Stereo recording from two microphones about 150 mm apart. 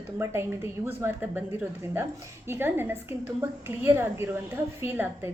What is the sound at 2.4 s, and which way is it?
A woman's voice, 15° right (ahead or behind).